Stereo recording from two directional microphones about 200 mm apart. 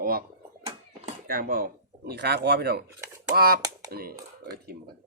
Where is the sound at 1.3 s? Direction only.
50° right (ahead or behind).